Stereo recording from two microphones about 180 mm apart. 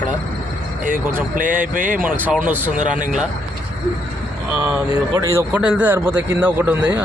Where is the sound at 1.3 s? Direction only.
50° right (ahead or behind).